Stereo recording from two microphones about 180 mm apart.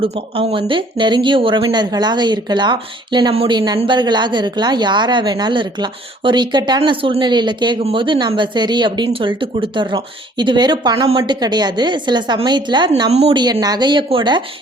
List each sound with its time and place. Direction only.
0.0 s a woman's voice: 30° right (ahead or behind)